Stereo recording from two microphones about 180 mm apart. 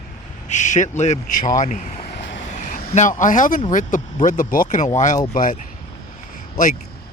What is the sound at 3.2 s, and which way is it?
Speech, 45° left (ahead or behind).